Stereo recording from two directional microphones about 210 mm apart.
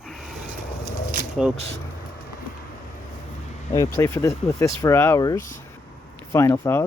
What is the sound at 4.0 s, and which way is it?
Speech, 15° left (ahead or behind).